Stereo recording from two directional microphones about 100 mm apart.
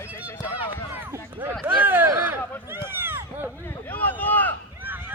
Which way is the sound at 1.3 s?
20° right (ahead or behind).